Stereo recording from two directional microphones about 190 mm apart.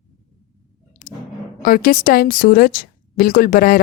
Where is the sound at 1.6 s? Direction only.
45° left (ahead or behind).